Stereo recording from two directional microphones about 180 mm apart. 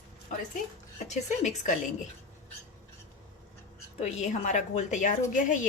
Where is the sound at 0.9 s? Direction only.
40° left (ahead or behind).